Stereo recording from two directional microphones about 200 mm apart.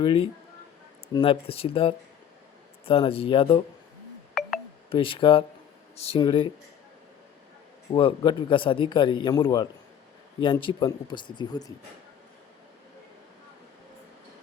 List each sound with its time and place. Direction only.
0.0 s speech: 25° left (ahead or behind)
4.9 s speech: 25° left (ahead or behind)
7.9 s speech: 25° left (ahead or behind)